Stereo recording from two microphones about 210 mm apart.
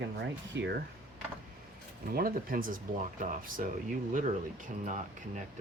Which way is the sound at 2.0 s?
45° right (ahead or behind).